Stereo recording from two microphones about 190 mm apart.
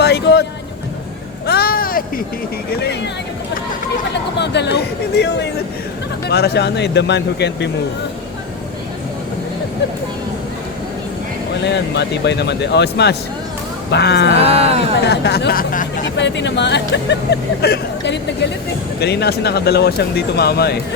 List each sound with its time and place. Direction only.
0.0 s vehicle: 60° left (ahead or behind)
1.5 s a sound: 55° left (ahead or behind)
2.8 s speech: 65° left (ahead or behind)
4.1 s speech: 65° left (ahead or behind)
11.6 s speech: 65° left (ahead or behind)
14.3 s a sound: 30° right (ahead or behind)
15.0 s speech: 60° left (ahead or behind); by 16.0 s 45° left (ahead or behind)
16.1 s speech: 65° left (ahead or behind)